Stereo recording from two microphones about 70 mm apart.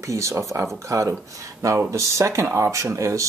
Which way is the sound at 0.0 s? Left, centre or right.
Right.